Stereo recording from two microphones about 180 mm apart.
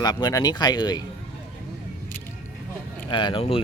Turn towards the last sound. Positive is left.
turn(degrees=30)  # may be behind; listen again after turning